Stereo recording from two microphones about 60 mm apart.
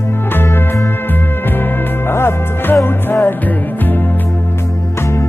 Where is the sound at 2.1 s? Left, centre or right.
Left.